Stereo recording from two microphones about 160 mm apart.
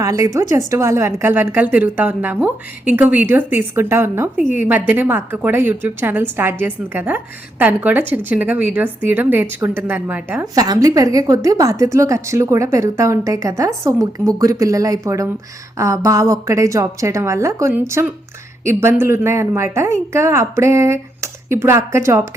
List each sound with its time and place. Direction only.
0.0 s a woman's voice: 20° right (ahead or behind)
10.4 s a woman's voice: 25° right (ahead or behind)